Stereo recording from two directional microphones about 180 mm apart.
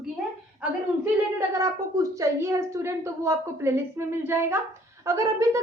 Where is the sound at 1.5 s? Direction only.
20° right (ahead or behind).